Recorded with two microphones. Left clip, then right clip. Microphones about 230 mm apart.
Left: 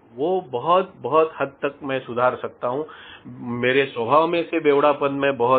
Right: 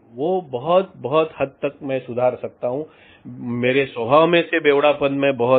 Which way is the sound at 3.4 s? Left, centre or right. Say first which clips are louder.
Right 1 dB; right.